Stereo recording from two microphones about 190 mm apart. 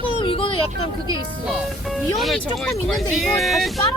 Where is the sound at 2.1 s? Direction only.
Centre (ahead or behind).